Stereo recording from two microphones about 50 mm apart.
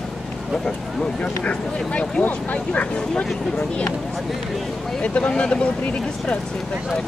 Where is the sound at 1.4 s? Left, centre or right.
Left.